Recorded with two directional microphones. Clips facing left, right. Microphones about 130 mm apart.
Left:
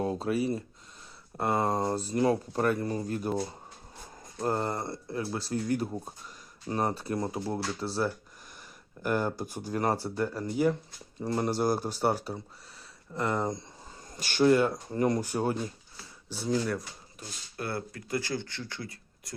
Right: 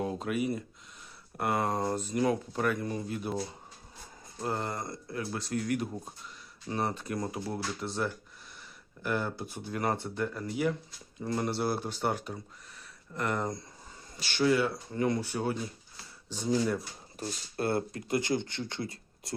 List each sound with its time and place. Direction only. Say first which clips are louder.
0.0 s speech: left 3 dB; 35° left (ahead or behind)
4.4 s speech: left 4 dB; 40° left (ahead or behind)
13.1 s speech: left 2 dB; 20° left (ahead or behind)
14.2 s speech: left 4 dB; 45° left (ahead or behind)
16.3 s speech: left 1 dB; 10° left (ahead or behind)
17.2 s speech: right 6 dB; 25° right (ahead or behind)